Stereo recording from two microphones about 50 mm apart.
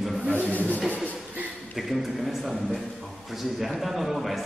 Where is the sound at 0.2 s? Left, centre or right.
Right.